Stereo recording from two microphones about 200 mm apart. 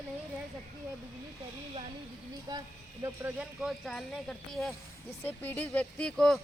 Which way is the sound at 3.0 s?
5° right (ahead or behind).